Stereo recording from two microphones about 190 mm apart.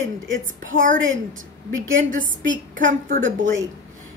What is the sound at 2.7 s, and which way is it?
Speech, 45° right (ahead or behind).